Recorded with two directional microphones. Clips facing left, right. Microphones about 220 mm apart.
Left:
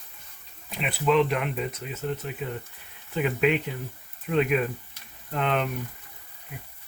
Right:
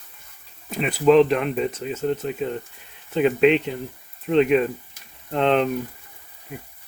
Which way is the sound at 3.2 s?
25° right (ahead or behind).